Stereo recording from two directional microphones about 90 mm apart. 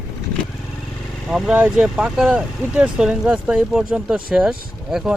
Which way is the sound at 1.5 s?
15° right (ahead or behind).